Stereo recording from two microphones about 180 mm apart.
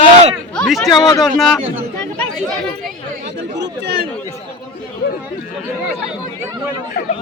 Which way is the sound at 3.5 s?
70° right (ahead or behind).